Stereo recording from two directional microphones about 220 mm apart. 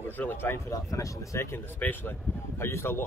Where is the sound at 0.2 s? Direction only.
10° left (ahead or behind).